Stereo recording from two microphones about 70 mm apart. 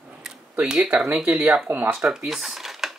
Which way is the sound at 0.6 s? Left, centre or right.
Centre.